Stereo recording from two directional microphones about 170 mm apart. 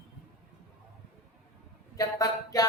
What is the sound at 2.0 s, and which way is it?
Speech, 20° left (ahead or behind).